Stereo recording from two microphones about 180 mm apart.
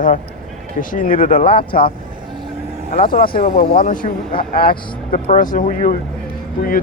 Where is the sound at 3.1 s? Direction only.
55° left (ahead or behind).